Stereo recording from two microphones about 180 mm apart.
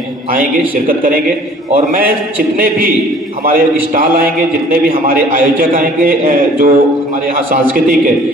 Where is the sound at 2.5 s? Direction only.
55° right (ahead or behind).